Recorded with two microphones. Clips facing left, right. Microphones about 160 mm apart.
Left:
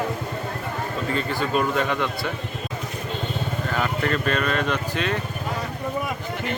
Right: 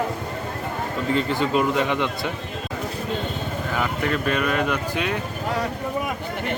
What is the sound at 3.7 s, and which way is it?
Speech, 10° right (ahead or behind).